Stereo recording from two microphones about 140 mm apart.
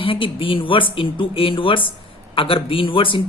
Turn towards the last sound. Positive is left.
turn(degrees=40)  # may be behind; listen again after turning